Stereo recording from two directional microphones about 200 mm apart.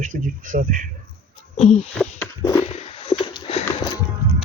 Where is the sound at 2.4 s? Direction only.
15° left (ahead or behind).